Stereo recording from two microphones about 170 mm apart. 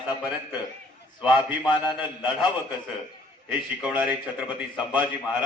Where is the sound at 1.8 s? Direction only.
25° left (ahead or behind).